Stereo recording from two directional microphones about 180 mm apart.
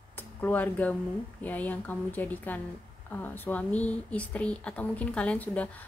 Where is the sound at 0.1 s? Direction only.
10° left (ahead or behind).